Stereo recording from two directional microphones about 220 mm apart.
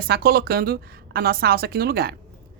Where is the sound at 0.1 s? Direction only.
45° right (ahead or behind).